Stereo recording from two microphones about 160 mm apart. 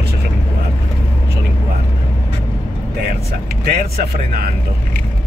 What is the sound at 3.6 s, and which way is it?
Speech, 70° right (ahead or behind).